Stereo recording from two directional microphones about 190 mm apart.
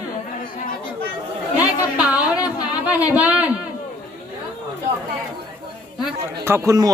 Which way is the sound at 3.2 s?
5° right (ahead or behind).